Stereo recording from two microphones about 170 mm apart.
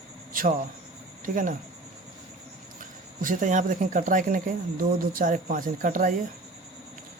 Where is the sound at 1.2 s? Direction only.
50° right (ahead or behind).